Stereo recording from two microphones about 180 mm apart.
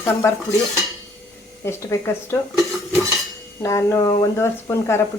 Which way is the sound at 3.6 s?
15° left (ahead or behind).